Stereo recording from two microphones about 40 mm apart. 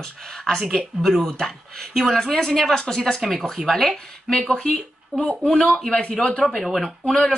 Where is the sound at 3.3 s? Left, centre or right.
Centre.